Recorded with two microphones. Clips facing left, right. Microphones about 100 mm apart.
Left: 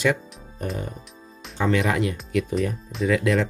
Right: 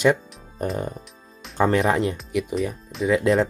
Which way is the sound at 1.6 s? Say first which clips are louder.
Right 3 dB; 35° right (ahead or behind).